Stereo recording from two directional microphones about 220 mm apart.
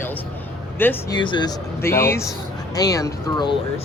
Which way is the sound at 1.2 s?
20° left (ahead or behind).